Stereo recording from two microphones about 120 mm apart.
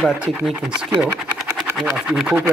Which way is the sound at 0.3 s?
Centre (ahead or behind).